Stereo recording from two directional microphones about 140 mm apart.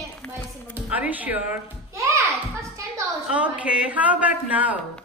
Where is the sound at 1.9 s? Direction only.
20° right (ahead or behind).